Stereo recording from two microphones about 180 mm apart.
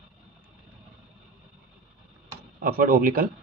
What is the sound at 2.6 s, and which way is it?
Speech, 55° right (ahead or behind).